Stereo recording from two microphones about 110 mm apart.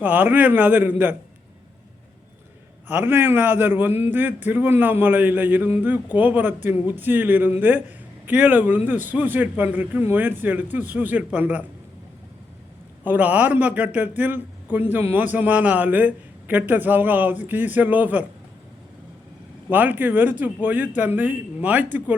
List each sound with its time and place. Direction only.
0.0 s a man's voice: 15° right (ahead or behind)
2.9 s a man's voice: 20° right (ahead or behind)
13.1 s a man's voice: 15° right (ahead or behind)
19.7 s a man's voice: 15° right (ahead or behind)